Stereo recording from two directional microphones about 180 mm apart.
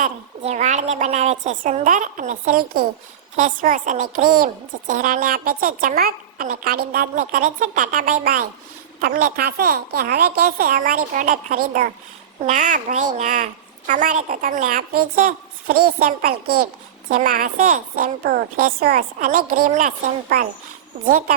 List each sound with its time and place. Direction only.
0.0 s a woman's voice: 40° right (ahead or behind)
21.0 s a child's voice: 55° right (ahead or behind)